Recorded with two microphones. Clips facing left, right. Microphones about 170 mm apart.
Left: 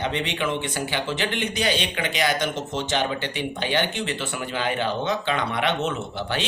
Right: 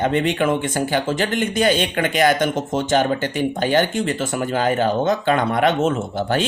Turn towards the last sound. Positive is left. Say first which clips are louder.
# right 7 dB
turn(degrees=-45)  # may be behind; listen again after turning